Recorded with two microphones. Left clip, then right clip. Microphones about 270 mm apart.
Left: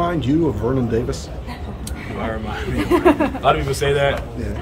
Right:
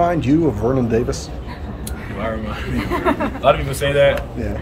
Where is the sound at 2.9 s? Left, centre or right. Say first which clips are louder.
Left 4 dB; left.